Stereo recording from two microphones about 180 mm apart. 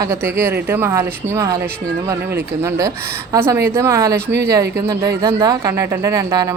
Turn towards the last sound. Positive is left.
turn(degrees=-15)  # may be behind; listen again after turning